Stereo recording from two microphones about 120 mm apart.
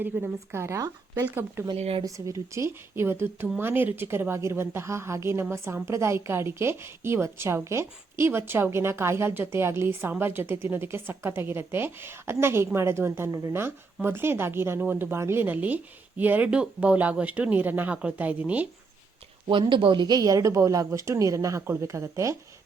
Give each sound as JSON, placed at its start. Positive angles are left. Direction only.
{"t": 0.0, "sound": "a woman's voice", "side_deg": -15}
{"t": 1.7, "sound": "speech", "side_deg": -55}
{"t": 2.0, "sound": "a woman's voice", "side_deg": -30}
{"t": 19.5, "sound": "a woman's voice", "side_deg": -45}